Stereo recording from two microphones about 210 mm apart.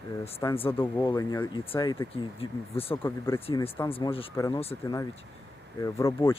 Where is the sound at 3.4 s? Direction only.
25° left (ahead or behind).